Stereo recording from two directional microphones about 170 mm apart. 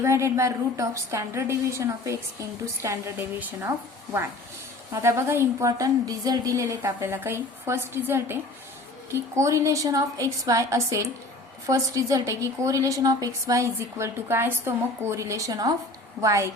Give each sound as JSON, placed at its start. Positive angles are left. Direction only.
{"t": 0.0, "sound": "a woman's voice", "side_deg": -15}